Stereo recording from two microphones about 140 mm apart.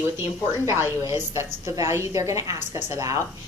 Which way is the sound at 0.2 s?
20° right (ahead or behind).